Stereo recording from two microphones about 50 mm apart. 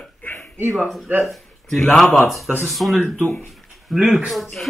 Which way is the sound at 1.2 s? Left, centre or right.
Centre.